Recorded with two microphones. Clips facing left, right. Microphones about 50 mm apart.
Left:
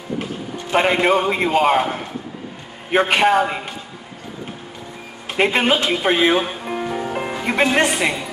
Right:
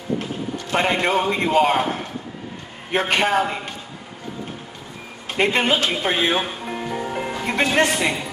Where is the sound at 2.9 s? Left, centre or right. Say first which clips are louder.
Left 4 dB; centre.